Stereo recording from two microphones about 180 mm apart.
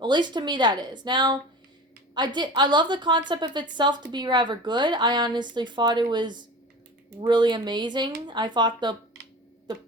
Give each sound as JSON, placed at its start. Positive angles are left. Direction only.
{"t": 0.0, "sound": "a woman's voice", "side_deg": -25}